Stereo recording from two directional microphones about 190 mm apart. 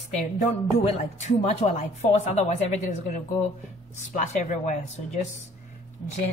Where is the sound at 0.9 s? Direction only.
35° left (ahead or behind).